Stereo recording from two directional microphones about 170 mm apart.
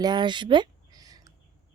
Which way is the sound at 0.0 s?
25° right (ahead or behind).